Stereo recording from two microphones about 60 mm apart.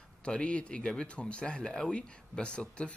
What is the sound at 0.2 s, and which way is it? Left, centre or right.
Speech, centre.